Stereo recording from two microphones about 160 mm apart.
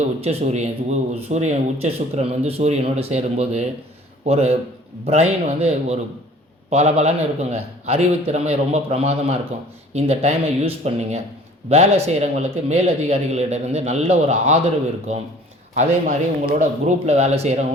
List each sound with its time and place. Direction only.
0.0 s speech: 40° right (ahead or behind)